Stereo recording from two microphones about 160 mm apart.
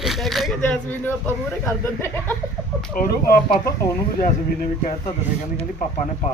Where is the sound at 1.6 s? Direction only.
15° left (ahead or behind).